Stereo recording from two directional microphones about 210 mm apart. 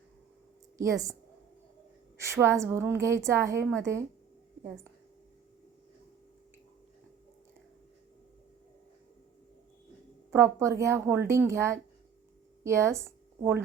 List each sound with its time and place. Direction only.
0.8 s a woman's voice: 15° right (ahead or behind)
2.1 s a woman's voice: 15° right (ahead or behind)
10.3 s a woman's voice: 15° right (ahead or behind)